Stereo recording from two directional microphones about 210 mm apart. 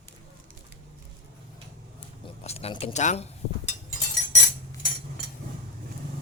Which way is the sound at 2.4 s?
30° left (ahead or behind).